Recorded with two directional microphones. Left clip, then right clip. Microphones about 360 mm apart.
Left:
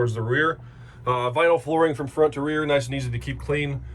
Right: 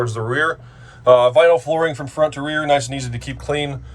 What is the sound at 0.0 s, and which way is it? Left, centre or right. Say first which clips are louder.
Speech: right 3 dB; centre.